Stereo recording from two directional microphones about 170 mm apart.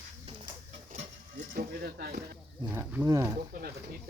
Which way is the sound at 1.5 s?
60° right (ahead or behind).